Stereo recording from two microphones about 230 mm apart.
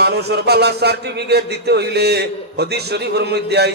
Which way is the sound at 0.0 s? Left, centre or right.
Right.